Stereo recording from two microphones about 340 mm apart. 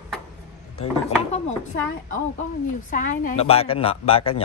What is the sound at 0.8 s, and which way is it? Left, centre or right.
Speech, centre.